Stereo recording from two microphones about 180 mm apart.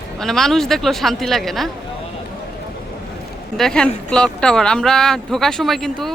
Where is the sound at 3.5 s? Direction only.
5° left (ahead or behind).